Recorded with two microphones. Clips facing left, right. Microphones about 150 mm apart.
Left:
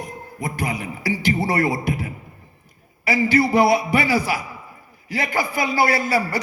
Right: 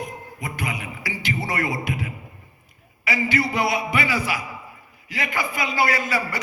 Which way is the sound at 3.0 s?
35° left (ahead or behind).